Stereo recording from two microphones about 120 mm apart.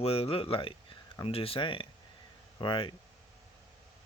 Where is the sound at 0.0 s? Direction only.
55° left (ahead or behind).